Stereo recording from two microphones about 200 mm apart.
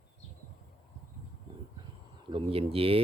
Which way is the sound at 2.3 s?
30° right (ahead or behind).